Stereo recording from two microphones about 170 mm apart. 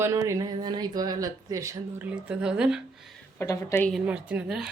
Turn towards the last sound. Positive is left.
turn(degrees=-5)  # may be behind; listen again after turning